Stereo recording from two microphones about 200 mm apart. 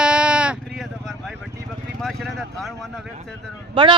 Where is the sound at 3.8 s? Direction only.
25° right (ahead or behind).